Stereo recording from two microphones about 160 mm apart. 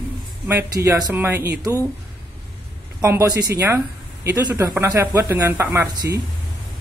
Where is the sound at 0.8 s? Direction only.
25° right (ahead or behind).